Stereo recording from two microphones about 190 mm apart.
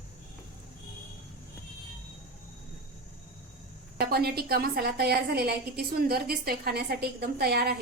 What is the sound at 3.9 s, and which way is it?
A woman's voice, 55° right (ahead or behind).